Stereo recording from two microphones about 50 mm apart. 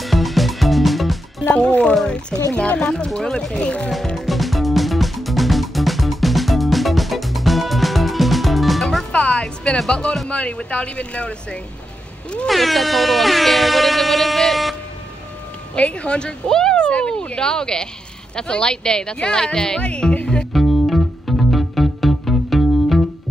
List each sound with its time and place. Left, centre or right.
0.0 s music: centre
1.5 s speech: centre
3.1 s speech: centre
3.5 s speech: left
4.3 s music: centre
9.1 s speech: centre
12.4 s air horn: centre
15.7 s speech: left
20.5 s music: centre